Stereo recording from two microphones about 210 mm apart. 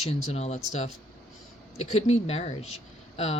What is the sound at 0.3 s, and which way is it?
Speech, 30° left (ahead or behind).